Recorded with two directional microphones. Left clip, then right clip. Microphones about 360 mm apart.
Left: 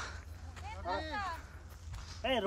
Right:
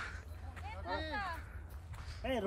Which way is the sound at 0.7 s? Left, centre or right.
Centre.